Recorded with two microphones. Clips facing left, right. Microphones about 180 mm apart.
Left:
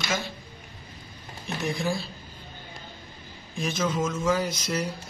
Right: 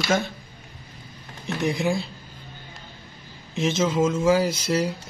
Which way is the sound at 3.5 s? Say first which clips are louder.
Right 5 dB; 25° right (ahead or behind).